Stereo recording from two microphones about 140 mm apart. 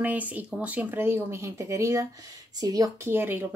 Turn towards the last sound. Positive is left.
turn(degrees=-15)  # may be behind; listen again after turning